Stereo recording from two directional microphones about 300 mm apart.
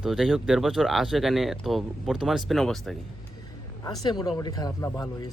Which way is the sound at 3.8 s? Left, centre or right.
Centre.